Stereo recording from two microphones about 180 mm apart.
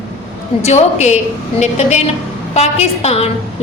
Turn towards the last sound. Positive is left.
turn(degrees=35)  # may be behind; listen again after turning